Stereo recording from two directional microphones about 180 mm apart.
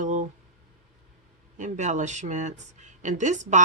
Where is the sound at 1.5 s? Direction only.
40° right (ahead or behind).